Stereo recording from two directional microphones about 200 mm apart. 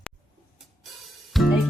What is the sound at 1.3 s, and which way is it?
Music, centre (ahead or behind).